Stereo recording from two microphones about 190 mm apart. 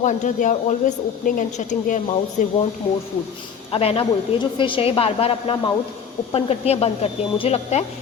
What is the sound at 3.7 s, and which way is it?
A woman's voice, 30° left (ahead or behind).